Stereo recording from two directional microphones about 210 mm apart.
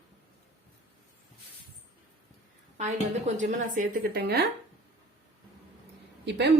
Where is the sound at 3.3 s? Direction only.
35° right (ahead or behind).